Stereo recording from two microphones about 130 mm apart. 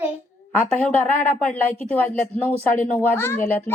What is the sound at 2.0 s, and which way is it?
Speech, 15° left (ahead or behind).